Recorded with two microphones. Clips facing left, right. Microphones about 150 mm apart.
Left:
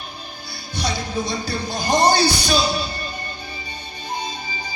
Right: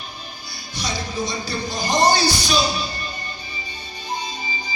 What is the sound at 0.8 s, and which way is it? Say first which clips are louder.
Music: left 2 dB; 60° left (ahead or behind).